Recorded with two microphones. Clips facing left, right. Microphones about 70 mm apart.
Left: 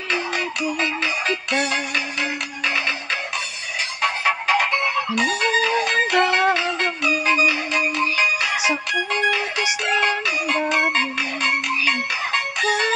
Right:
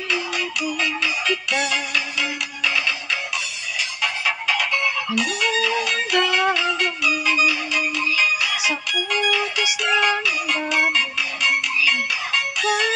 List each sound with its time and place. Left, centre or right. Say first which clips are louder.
0.1 s music: left 2 dB; left